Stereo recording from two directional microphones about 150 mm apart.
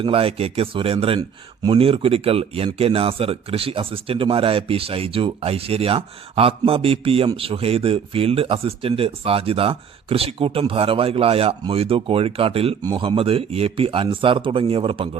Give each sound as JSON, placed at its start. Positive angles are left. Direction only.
{"t": 0.0, "sound": "speech", "side_deg": -40}